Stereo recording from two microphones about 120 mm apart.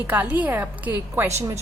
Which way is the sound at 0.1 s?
15° right (ahead or behind).